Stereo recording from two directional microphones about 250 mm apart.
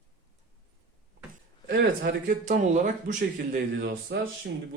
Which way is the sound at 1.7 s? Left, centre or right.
Right.